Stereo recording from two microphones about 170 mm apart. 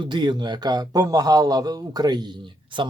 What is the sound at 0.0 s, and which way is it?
A man's voice, 25° right (ahead or behind).